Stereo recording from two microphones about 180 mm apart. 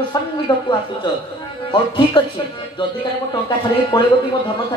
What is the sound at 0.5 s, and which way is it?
Speech, 25° left (ahead or behind).